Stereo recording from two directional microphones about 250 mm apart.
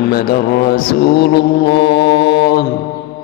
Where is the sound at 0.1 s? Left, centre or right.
Left.